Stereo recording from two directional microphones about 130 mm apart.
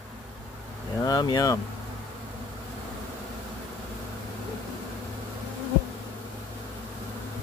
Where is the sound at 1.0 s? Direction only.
30° left (ahead or behind).